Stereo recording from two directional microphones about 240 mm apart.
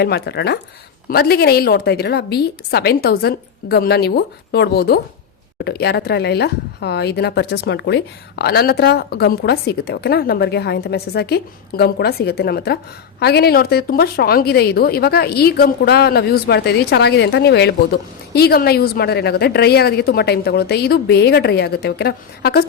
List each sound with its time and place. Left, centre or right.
0.0 s a woman's voice: left